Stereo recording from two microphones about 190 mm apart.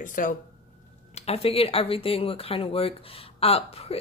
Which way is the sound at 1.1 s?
30° left (ahead or behind).